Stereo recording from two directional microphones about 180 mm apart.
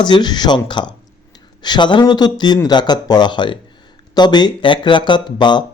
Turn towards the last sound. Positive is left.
turn(degrees=25)  # may be behind; listen again after turning